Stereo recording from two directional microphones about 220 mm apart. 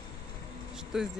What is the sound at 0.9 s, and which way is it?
Speech, centre (ahead or behind).